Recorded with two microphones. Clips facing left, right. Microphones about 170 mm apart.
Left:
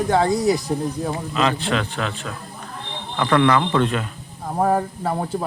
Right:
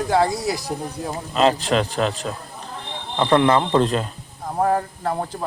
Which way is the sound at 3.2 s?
25° right (ahead or behind).